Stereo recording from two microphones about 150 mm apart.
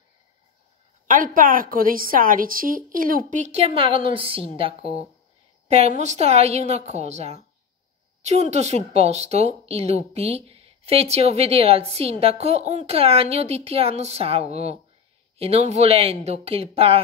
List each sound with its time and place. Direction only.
1.0 s a woman's voice: 65° right (ahead or behind); by 17.0 s 40° right (ahead or behind)